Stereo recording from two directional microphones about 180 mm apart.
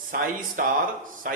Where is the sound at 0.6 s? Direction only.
50° right (ahead or behind).